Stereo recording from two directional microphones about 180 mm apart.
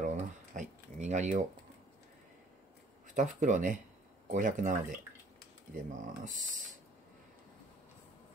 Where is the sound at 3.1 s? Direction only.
45° right (ahead or behind).